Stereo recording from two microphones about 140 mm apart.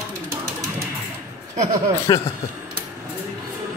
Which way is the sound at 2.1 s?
30° left (ahead or behind).